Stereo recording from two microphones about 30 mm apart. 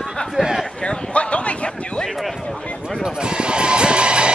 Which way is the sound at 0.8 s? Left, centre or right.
Left.